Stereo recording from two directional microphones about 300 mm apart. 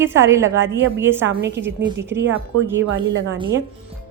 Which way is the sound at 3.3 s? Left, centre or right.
Centre.